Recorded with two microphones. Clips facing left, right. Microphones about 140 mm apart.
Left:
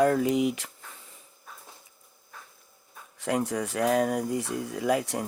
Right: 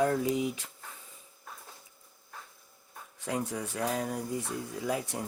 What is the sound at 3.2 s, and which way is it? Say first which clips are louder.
Speech: left 6 dB; 85° left.